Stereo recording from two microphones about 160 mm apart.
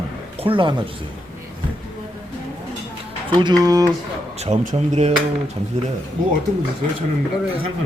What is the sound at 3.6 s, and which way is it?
Speech, 25° right (ahead or behind).